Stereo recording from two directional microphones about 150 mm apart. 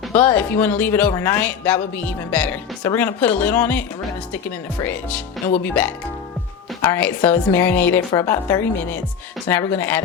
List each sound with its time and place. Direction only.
0.2 s a woman's voice: 10° left (ahead or behind)